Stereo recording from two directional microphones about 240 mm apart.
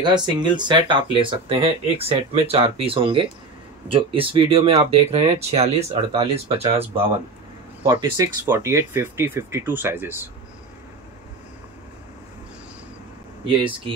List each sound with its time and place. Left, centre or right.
0.0 s speech: centre
7.9 s speech: centre